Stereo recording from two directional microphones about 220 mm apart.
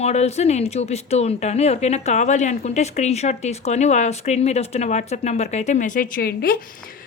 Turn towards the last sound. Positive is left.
turn(degrees=40)  # may be behind; listen again after turning